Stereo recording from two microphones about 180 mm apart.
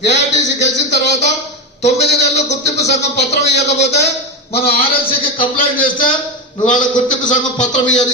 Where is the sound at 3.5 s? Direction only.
70° left (ahead or behind).